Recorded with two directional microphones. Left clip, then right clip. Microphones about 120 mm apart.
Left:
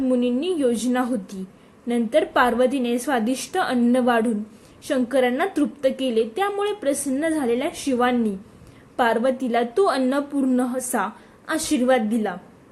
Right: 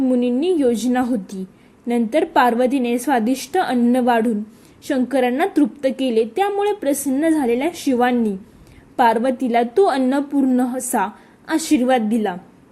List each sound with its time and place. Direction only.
0.0 s a woman's voice: 30° right (ahead or behind)